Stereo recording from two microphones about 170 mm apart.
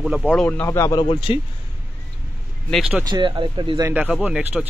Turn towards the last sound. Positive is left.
turn(degrees=-5)  # may be behind; listen again after turning